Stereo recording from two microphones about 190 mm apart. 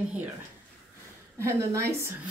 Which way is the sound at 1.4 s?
15° right (ahead or behind).